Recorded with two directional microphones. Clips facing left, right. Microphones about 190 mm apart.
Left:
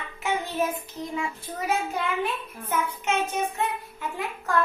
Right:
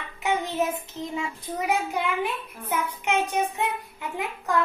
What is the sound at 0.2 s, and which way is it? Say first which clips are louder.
Child singing: right 1 dB; 20° right (ahead or behind).